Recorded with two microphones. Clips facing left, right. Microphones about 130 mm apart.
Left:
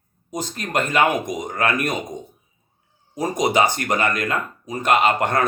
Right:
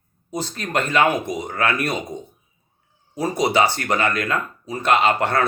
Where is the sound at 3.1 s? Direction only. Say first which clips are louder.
Even; 15° left (ahead or behind).